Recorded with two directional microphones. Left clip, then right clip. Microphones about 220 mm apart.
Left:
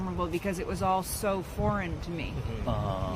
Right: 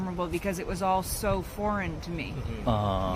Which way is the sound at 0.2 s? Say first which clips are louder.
Right 1 dB; 15° right (ahead or behind).